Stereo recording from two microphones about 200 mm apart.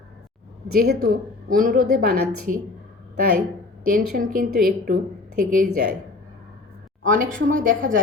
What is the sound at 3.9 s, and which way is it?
A woman's voice, 45° right (ahead or behind).